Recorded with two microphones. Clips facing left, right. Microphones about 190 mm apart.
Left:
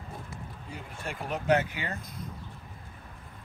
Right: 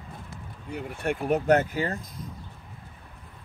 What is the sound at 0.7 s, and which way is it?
Speech, 65° right (ahead or behind).